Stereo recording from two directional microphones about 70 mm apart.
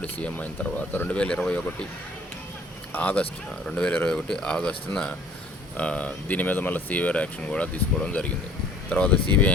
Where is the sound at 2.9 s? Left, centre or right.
Left.